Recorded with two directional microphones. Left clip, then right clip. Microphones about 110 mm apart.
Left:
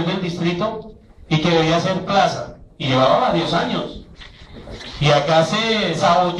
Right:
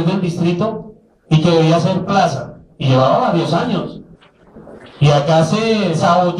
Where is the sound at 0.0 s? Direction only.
20° left (ahead or behind).